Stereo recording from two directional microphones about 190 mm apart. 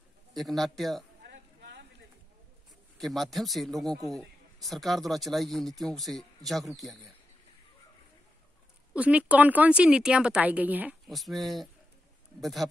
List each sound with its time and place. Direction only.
0.4 s speech: centre (ahead or behind)
1.2 s a sound: 60° right (ahead or behind)
3.0 s speech: centre (ahead or behind)
8.9 s speech: 5° right (ahead or behind)